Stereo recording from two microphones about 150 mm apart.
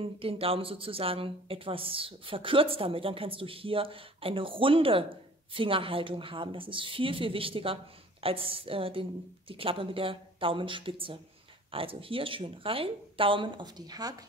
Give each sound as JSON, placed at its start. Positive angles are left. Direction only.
{"t": 0.0, "sound": "speech", "side_deg": -40}